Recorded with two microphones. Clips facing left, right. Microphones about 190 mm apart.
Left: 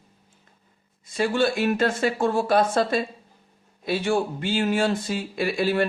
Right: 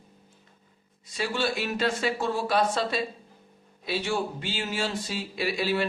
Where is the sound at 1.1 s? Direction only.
50° left (ahead or behind).